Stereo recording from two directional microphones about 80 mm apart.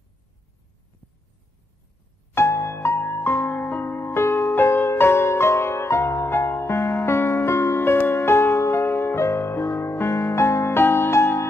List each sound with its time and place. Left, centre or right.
2.3 s music: left